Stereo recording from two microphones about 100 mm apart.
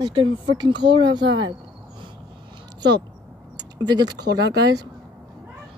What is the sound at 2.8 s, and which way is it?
Speech, 45° right (ahead or behind).